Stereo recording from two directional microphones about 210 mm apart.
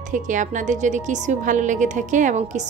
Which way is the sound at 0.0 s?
35° right (ahead or behind).